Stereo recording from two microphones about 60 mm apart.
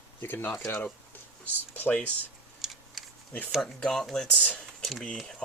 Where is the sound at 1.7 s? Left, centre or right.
Left.